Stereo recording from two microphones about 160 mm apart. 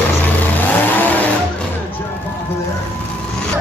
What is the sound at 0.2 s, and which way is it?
Vehicle, 10° left (ahead or behind).